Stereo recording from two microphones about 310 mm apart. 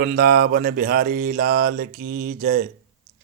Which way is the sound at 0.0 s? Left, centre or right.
Right.